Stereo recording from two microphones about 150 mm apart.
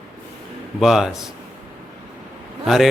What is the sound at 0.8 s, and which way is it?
Speech, 5° right (ahead or behind).